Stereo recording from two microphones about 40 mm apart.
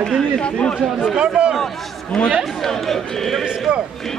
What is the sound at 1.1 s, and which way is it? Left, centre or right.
Speech, right.